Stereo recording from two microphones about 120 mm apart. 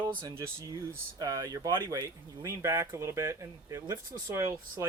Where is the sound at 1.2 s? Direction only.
30° right (ahead or behind).